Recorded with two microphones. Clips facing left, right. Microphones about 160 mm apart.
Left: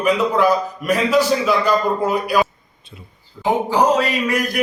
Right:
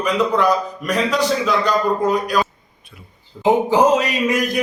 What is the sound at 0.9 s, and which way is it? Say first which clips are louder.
A man's voice: left 3 dB; 5° left (ahead or behind).